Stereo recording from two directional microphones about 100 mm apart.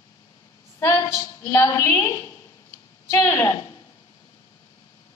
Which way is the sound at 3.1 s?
30° left (ahead or behind).